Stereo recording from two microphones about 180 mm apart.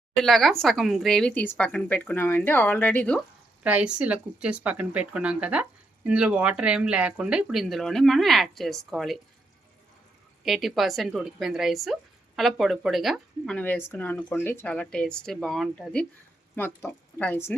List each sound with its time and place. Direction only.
0.2 s speech: centre (ahead or behind)
3.6 s speech: 5° right (ahead or behind)
10.4 s speech: centre (ahead or behind)